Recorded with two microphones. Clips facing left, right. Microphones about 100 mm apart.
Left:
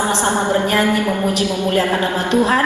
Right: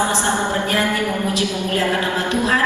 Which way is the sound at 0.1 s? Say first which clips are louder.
Left 3 dB; 20° left (ahead or behind).